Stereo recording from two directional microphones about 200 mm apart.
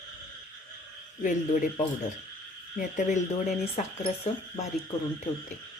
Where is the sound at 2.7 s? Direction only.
40° left (ahead or behind).